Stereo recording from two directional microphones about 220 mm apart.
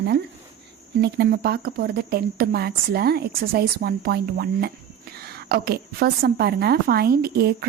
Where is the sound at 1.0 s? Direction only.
45° right (ahead or behind).